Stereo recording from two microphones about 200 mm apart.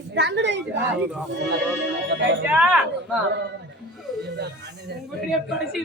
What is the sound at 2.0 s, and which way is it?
Speech, 60° right (ahead or behind).